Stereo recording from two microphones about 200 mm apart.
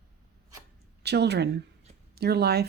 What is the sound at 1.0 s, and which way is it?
Speech, 55° right (ahead or behind).